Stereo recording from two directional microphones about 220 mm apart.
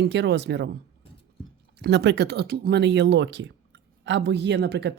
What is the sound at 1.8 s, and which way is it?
A woman's voice, 50° right (ahead or behind).